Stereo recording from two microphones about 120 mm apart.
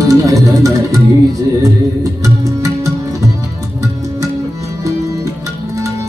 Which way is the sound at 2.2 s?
25° right (ahead or behind).